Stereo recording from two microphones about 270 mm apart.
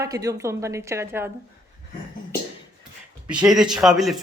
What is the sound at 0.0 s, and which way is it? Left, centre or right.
A woman's voice, centre.